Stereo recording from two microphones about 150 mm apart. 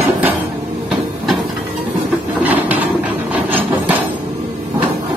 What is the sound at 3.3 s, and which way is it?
Hammer, 10° right (ahead or behind).